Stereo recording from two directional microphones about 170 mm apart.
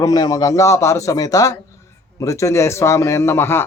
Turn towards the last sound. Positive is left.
turn(degrees=15)  # may be behind; listen again after turning